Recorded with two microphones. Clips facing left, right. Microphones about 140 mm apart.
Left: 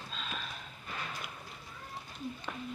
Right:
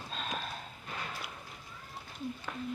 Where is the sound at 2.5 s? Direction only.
5° left (ahead or behind).